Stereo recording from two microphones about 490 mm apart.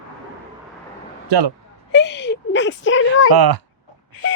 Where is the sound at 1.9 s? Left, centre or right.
Left.